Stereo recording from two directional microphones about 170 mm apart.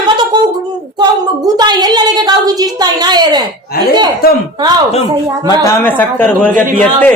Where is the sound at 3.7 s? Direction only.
60° left (ahead or behind).